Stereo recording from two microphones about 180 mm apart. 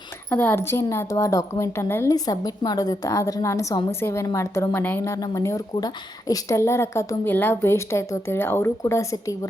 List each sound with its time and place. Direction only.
0.3 s a woman's voice: 10° left (ahead or behind)